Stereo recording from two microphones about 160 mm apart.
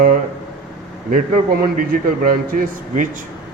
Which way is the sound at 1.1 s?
60° right (ahead or behind).